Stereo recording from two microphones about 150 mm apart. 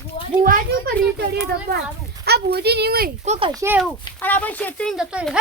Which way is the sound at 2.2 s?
90° right.